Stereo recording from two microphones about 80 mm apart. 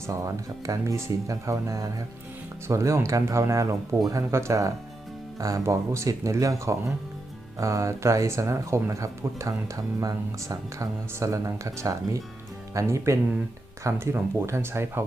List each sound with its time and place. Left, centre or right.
0.1 s speech: right